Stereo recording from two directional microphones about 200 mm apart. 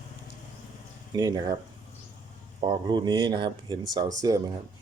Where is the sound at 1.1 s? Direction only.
20° right (ahead or behind).